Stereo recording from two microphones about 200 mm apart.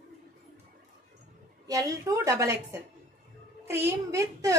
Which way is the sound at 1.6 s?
15° right (ahead or behind).